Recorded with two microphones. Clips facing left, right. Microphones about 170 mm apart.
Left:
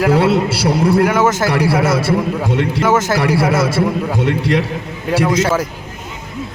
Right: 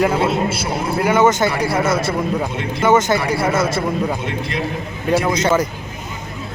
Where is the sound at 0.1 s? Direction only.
75° left (ahead or behind).